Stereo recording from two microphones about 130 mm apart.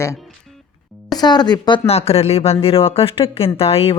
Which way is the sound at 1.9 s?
50° left (ahead or behind).